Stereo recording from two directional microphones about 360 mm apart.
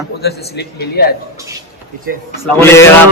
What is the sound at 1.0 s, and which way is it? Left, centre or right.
Speech, left.